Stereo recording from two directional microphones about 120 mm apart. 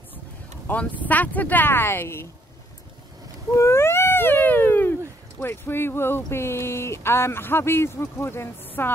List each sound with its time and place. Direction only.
0.7 s speech: 15° left (ahead or behind)
3.5 s a sound: 20° left (ahead or behind)
5.4 s speech: 20° left (ahead or behind)